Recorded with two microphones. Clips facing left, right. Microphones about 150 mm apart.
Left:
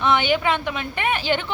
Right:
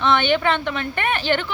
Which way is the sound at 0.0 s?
10° left (ahead or behind).